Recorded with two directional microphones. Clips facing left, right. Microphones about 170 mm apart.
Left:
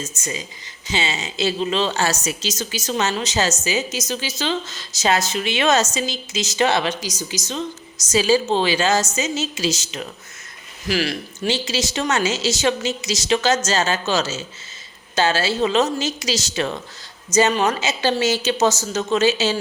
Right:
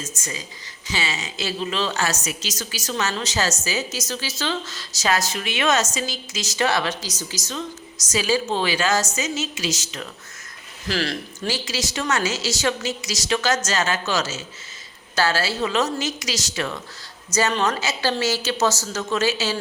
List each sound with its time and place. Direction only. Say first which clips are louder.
0.0 s a woman's voice: left 4 dB; 25° left (ahead or behind)
10.8 s speech: left 3 dB; 10° left (ahead or behind)
11.3 s a woman's voice: left 6 dB; 25° left (ahead or behind)